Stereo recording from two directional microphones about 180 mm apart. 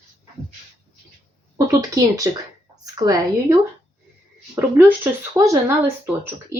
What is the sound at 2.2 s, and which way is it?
A woman's voice, 20° right (ahead or behind).